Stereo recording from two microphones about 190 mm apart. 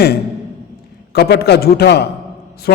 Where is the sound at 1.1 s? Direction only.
60° left (ahead or behind).